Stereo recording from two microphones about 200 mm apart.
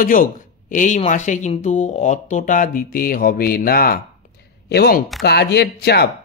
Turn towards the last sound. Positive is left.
turn(degrees=55)  # may be behind; listen again after turning